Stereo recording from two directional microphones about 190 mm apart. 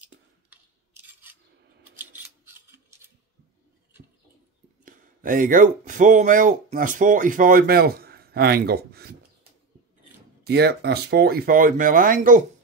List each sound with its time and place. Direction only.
0.5 s a sound: 10° right (ahead or behind)
2.0 s scissors: 10° right (ahead or behind)
4.8 s speech: 45° right (ahead or behind)
10.4 s speech: 60° right (ahead or behind)